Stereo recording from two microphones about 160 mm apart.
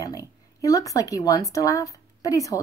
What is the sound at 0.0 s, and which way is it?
Speech, 20° left (ahead or behind).